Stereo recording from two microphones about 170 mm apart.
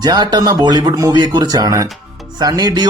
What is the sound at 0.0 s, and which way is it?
Speech, 25° right (ahead or behind).